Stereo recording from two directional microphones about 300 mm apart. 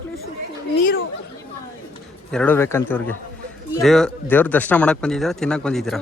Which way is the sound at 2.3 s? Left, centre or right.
Centre.